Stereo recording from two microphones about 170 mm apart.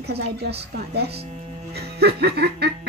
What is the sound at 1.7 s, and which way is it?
Music, 70° right (ahead or behind).